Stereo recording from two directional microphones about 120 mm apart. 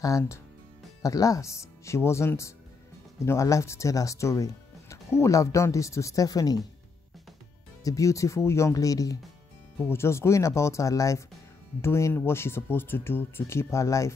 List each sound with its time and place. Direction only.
0.0 s speech: 25° left (ahead or behind)
7.8 s speech: 30° left (ahead or behind)